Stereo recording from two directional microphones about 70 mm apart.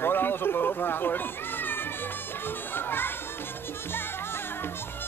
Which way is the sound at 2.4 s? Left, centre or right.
Left.